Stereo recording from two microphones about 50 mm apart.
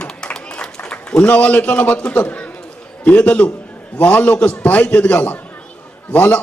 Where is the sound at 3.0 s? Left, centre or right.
Left.